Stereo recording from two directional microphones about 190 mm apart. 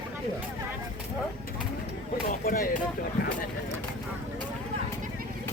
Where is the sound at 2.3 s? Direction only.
50° left (ahead or behind).